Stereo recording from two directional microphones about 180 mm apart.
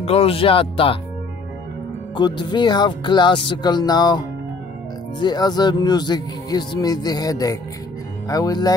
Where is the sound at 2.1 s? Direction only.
25° left (ahead or behind).